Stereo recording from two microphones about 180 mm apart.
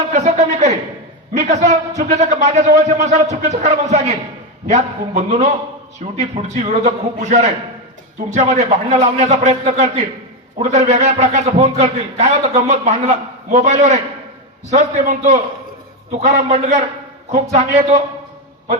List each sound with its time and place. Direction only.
0.1 s a man's voice: 40° right (ahead or behind)